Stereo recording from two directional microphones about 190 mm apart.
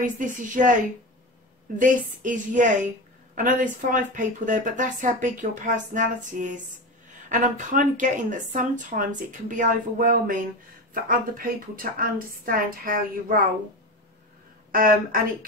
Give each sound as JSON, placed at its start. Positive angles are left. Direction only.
{"t": 0.0, "sound": "a woman's voice", "side_deg": -45}
{"t": 1.8, "sound": "a woman's voice", "side_deg": -40}
{"t": 14.7, "sound": "a woman's voice", "side_deg": -50}